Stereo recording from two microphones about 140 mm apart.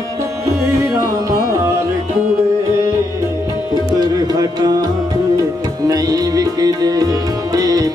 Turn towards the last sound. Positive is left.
turn(degrees=-25)  # may be behind; listen again after turning